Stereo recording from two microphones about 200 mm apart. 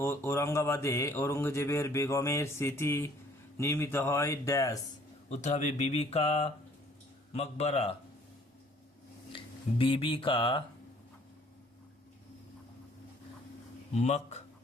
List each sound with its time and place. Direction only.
0.0 s speech: 15° left (ahead or behind)
5.3 s speech: 35° left (ahead or behind)
9.3 s speech: 25° left (ahead or behind)
13.9 s speech: 35° left (ahead or behind)